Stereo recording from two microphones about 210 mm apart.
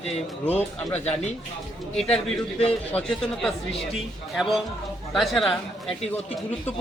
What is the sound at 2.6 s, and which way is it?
Speech, 30° left (ahead or behind).